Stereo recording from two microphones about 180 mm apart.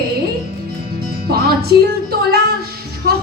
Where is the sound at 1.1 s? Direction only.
60° right (ahead or behind).